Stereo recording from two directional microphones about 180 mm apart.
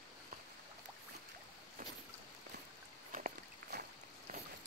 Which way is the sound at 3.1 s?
50° right (ahead or behind).